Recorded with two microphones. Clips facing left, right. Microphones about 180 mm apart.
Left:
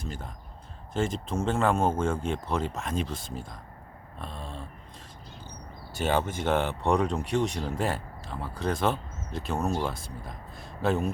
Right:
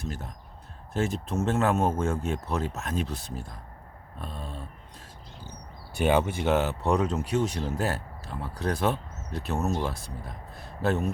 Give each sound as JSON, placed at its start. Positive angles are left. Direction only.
{"t": 0.0, "sound": "speech", "side_deg": 0}
{"t": 6.0, "sound": "speech", "side_deg": -15}